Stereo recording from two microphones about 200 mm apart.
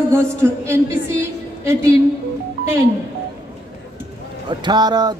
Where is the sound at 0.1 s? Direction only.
15° right (ahead or behind).